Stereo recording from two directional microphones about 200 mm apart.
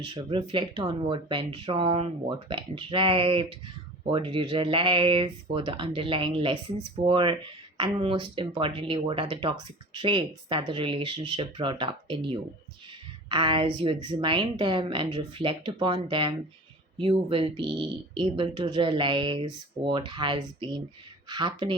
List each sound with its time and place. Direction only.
0.0 s speech: 25° right (ahead or behind)
13.2 s speech: 25° right (ahead or behind)